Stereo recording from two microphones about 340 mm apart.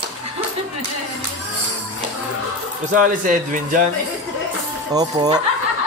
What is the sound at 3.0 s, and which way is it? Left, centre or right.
Speech, right.